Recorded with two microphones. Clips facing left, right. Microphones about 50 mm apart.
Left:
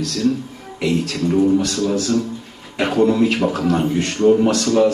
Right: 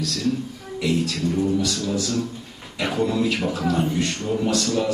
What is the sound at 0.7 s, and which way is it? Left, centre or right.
A woman's voice, left.